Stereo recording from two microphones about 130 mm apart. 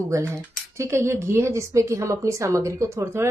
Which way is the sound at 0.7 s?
20° right (ahead or behind).